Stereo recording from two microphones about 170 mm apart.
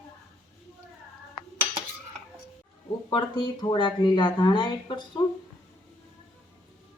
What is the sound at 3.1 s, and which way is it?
Speech, 25° left (ahead or behind).